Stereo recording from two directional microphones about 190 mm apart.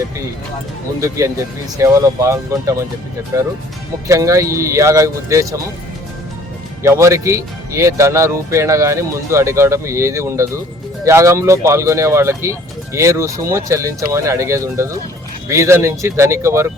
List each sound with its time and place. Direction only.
1.8 s speech: 15° right (ahead or behind)
6.8 s speech: 15° right (ahead or behind)